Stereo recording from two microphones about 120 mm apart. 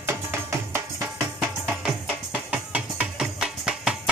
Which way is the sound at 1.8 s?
10° right (ahead or behind).